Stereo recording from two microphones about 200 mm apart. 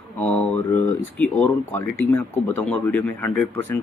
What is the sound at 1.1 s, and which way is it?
Speech, 5° left (ahead or behind).